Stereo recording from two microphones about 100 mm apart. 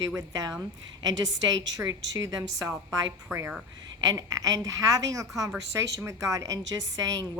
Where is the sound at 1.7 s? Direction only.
35° right (ahead or behind).